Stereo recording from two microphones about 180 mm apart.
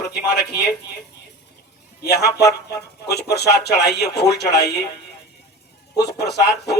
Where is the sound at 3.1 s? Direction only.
65° left (ahead or behind).